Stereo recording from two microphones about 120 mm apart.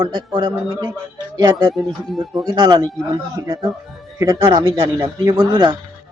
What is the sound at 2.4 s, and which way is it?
Speech, 35° right (ahead or behind).